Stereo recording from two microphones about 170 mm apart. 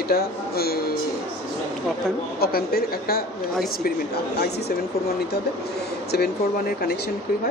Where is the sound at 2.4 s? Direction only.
65° left (ahead or behind).